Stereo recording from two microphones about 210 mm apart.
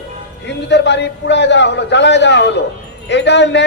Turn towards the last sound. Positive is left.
turn(degrees=55)  # may be behind; listen again after turning